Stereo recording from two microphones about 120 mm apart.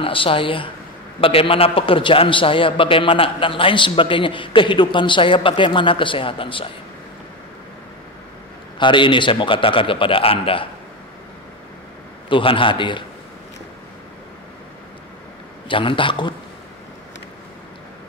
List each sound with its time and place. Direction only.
0.0 s a man's voice: 45° left (ahead or behind)
8.7 s a man's voice: 40° left (ahead or behind)
12.3 s a man's voice: 45° left (ahead or behind)
15.7 s a man's voice: 45° left (ahead or behind)